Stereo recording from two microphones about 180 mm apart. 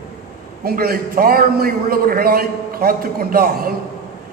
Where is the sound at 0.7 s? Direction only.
55° right (ahead or behind).